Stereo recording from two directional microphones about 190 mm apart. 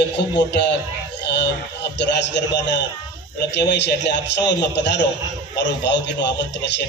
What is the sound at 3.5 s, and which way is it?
Speech, 65° left (ahead or behind).